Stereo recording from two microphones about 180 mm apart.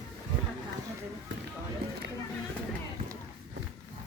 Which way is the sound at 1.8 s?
60° right (ahead or behind).